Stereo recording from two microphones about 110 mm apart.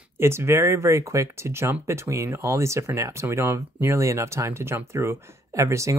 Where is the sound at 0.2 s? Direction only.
25° right (ahead or behind).